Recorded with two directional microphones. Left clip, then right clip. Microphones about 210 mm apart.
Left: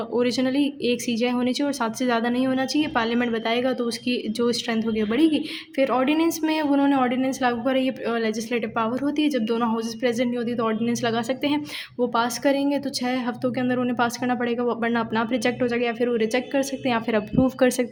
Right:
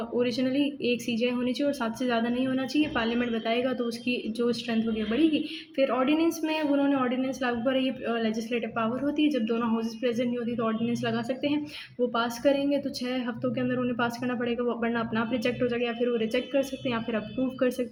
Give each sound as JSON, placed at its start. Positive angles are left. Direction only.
{"t": 0.2, "sound": "speech", "side_deg": 40}